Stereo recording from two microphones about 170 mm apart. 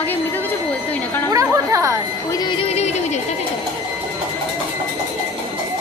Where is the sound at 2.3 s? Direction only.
30° left (ahead or behind).